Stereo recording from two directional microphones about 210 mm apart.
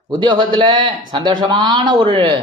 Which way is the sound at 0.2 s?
20° right (ahead or behind).